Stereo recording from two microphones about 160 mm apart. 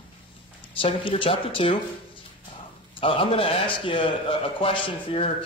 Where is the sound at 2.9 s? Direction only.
35° left (ahead or behind).